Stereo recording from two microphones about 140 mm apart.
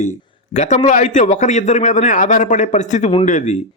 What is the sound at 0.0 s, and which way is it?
A man's voice, 55° left (ahead or behind).